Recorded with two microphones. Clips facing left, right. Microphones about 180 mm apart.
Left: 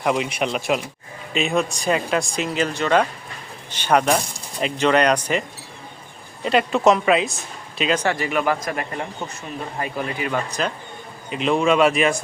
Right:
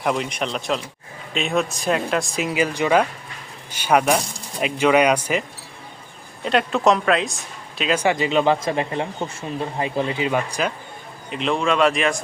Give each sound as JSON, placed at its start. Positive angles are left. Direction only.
{"t": 0.0, "sound": "speech", "side_deg": 0}
{"t": 8.0, "sound": "speech", "side_deg": -20}
{"t": 11.3, "sound": "speech", "side_deg": 5}